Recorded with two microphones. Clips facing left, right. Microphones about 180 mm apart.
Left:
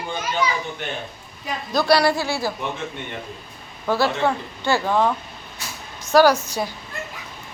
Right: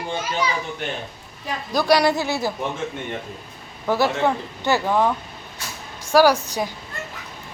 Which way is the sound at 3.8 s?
15° right (ahead or behind).